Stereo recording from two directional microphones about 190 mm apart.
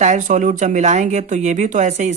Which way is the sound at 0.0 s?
40° right (ahead or behind).